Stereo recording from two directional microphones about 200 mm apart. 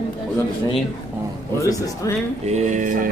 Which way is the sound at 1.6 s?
15° left (ahead or behind).